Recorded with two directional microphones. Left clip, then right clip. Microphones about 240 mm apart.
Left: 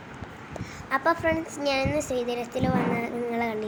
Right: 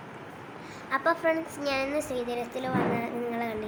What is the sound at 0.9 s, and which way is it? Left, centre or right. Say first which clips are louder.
A woman's voice: left 2 dB; centre.